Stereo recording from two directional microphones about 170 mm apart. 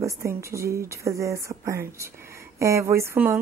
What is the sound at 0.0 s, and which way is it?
A woman's voice, 15° right (ahead or behind).